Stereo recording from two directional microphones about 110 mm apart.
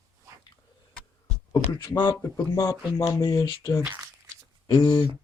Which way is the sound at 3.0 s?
30° left (ahead or behind).